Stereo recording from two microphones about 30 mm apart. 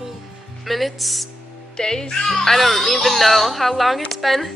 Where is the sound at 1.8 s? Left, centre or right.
Left.